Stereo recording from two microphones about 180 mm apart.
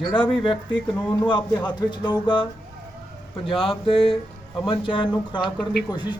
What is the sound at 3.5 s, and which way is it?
A man's voice, 30° left (ahead or behind).